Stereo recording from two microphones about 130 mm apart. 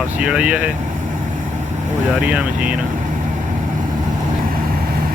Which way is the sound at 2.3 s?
10° right (ahead or behind).